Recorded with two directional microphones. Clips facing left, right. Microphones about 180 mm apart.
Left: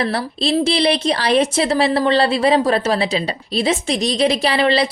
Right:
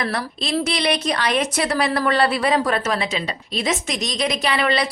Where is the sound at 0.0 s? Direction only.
30° left (ahead or behind).